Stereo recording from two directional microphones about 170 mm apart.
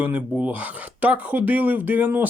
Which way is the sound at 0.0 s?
10° right (ahead or behind).